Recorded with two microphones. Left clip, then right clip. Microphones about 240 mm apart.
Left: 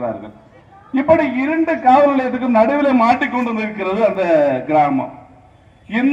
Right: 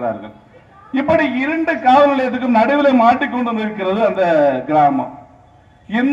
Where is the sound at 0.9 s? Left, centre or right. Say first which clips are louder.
Left 1 dB; right.